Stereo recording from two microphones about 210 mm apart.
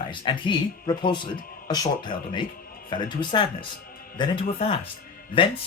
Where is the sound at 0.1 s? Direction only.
25° left (ahead or behind).